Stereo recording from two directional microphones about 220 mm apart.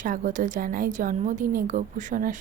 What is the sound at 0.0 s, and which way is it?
A woman's voice, 35° right (ahead or behind).